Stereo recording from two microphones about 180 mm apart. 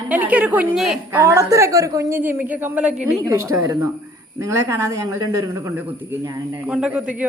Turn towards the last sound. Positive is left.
turn(degrees=-5)  # may be behind; listen again after turning